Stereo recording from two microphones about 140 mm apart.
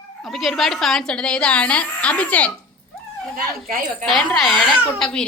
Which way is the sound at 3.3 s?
90° right.